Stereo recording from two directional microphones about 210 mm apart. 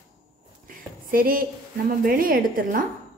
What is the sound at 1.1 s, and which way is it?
A woman's voice, 45° right (ahead or behind).